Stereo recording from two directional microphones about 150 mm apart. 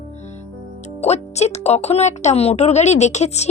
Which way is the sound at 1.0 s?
45° left (ahead or behind).